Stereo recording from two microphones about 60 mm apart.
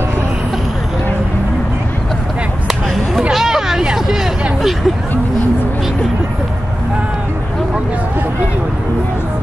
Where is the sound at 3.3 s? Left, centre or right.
Centre.